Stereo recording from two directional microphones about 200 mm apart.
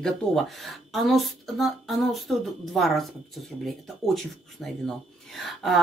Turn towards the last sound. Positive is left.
turn(degrees=0)  # may be behind; listen again after turning